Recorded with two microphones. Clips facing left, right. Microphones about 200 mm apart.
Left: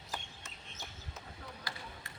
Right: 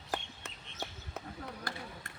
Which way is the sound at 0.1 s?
60° right (ahead or behind).